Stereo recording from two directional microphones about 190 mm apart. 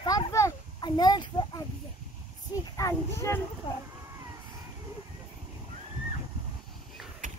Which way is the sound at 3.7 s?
25° left (ahead or behind).